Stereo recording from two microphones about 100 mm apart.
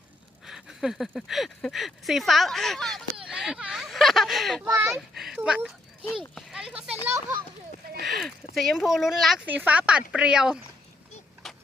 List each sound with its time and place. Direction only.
0.4 s speech: 5° right (ahead or behind)
3.2 s a sound: 5° right (ahead or behind)
4.7 s a child's voice: 25° right (ahead or behind)
4.9 s a child's voice: centre (ahead or behind)
5.4 s a child's voice: 15° right (ahead or behind)
8.0 s speech: centre (ahead or behind)
9.5 s speech: 15° right (ahead or behind)
11.4 s vehicle: centre (ahead or behind)